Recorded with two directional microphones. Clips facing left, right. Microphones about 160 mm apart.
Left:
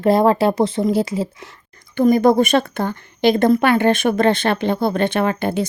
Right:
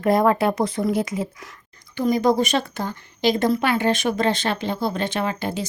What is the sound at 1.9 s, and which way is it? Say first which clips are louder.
A woman's voice: left 6 dB; 55° left (ahead or behind).